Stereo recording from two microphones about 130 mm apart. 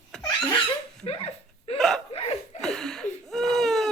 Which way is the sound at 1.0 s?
50° left (ahead or behind).